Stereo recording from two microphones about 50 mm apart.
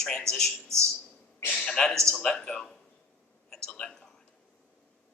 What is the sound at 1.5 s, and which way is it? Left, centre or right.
A man's voice, centre.